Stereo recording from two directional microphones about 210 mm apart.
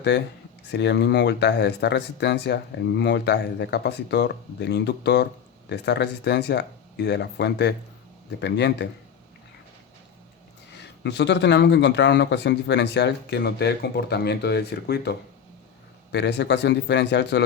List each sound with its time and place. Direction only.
0.7 s a man's voice: 55° left (ahead or behind)
10.8 s a man's voice: 55° left (ahead or behind)
16.1 s a man's voice: 55° left (ahead or behind)